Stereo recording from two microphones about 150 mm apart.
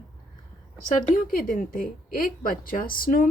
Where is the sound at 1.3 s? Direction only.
65° left (ahead or behind).